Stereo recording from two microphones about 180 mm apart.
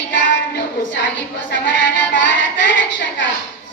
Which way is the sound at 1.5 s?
90° left.